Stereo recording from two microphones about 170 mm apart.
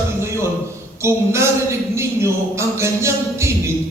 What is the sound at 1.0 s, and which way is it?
Speech, 15° right (ahead or behind).